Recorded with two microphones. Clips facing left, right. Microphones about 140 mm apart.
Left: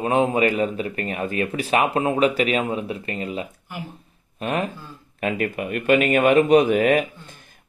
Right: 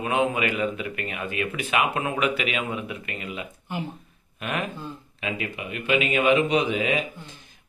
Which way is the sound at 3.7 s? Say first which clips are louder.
Right 5 dB; 25° right (ahead or behind).